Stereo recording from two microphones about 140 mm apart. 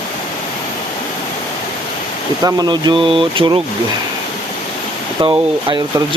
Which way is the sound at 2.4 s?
30° right (ahead or behind).